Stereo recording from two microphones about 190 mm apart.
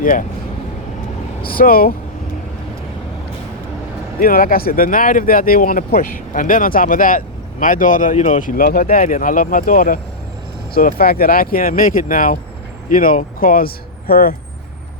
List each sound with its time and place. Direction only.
0.0 s speech: 45° left (ahead or behind)
1.4 s speech: 50° left (ahead or behind)
4.2 s speech: 50° left (ahead or behind)